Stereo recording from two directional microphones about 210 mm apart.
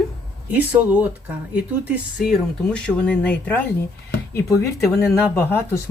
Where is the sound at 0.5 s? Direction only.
5° right (ahead or behind).